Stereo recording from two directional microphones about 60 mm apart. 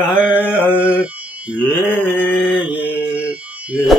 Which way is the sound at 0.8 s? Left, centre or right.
Right.